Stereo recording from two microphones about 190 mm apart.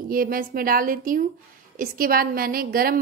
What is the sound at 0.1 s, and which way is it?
A woman's voice, 50° right (ahead or behind).